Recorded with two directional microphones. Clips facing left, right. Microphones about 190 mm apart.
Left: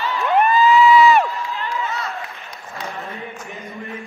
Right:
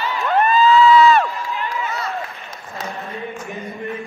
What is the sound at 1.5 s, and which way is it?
Run, 15° right (ahead or behind).